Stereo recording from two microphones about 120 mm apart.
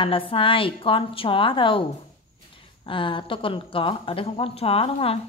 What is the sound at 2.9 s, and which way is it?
Speech, 45° left (ahead or behind).